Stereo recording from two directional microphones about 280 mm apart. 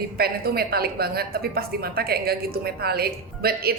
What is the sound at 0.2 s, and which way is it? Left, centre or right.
A woman's voice, right.